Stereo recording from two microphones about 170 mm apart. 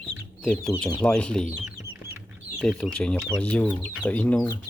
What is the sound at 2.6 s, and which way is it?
Speech, centre (ahead or behind).